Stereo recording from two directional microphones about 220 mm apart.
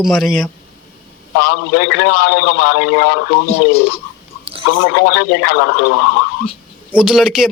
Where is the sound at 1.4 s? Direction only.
45° left (ahead or behind).